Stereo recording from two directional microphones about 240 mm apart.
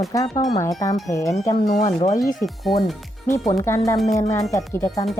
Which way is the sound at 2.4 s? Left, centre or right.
Centre.